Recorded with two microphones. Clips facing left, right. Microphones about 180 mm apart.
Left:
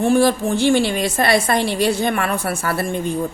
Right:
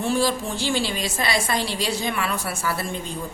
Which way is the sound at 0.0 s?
55° left (ahead or behind).